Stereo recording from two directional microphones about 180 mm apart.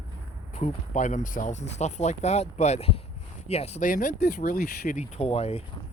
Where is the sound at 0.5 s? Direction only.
45° left (ahead or behind).